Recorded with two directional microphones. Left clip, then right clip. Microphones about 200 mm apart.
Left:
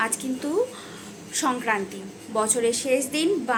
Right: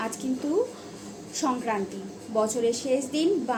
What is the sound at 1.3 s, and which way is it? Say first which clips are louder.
A woman's voice: left 3 dB; centre (ahead or behind).